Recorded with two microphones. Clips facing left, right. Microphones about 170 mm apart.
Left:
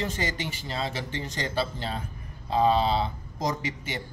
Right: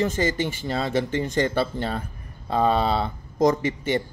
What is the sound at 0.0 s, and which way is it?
A man's voice, 50° right (ahead or behind).